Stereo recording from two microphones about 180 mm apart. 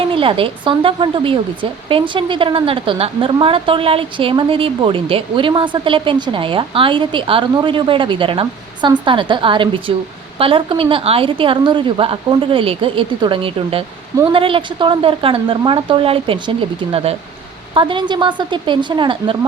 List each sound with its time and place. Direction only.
0.1 s a woman's voice: 30° right (ahead or behind)